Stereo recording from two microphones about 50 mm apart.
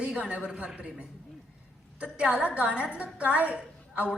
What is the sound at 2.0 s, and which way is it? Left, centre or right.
A woman's voice, right.